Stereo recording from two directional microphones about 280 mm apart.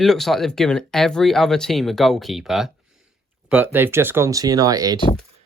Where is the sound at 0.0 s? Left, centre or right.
Centre.